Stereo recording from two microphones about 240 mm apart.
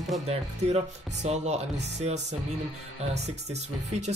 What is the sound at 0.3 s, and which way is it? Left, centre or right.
Speech, right.